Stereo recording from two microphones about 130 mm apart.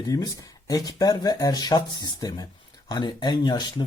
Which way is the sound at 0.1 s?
30° left (ahead or behind).